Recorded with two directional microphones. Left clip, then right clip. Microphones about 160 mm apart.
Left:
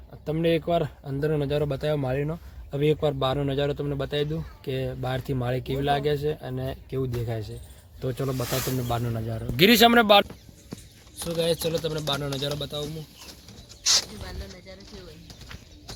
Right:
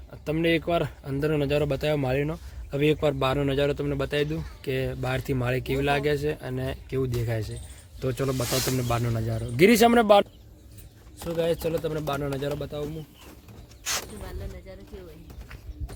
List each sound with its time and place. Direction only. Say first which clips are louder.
0.3 s speech: even; 5° right (ahead or behind)
12.2 s speech: even; 5° right (ahead or behind)